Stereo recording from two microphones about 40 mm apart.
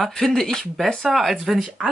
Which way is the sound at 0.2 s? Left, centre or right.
Centre.